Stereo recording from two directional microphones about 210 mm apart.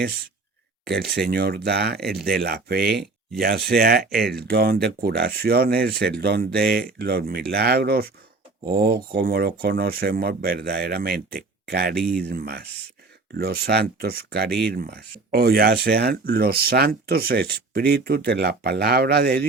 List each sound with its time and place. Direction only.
0.9 s speech: 50° right (ahead or behind)